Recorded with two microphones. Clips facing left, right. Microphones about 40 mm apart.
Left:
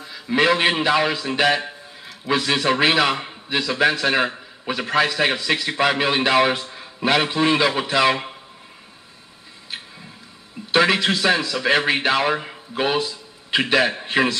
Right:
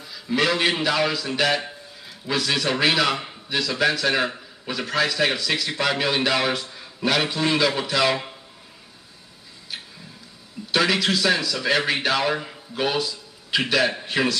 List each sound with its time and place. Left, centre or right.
0.0 s a man's voice: left
10.7 s a man's voice: left